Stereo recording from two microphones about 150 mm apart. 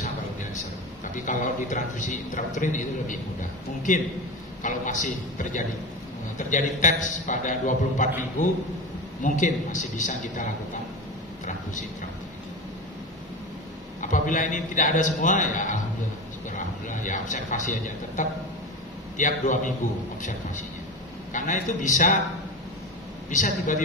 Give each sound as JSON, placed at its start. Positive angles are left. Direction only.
{"t": 1.1, "sound": "a man's voice", "side_deg": 60}
{"t": 9.2, "sound": "a man's voice", "side_deg": 55}
{"t": 14.0, "sound": "a man's voice", "side_deg": 60}
{"t": 16.4, "sound": "a sound", "side_deg": 55}
{"t": 19.1, "sound": "a man's voice", "side_deg": 55}
{"t": 23.3, "sound": "a man's voice", "side_deg": 60}